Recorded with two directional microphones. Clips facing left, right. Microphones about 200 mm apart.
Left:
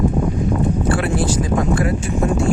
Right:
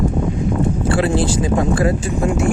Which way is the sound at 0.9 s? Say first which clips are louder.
Right 2 dB; 25° right (ahead or behind).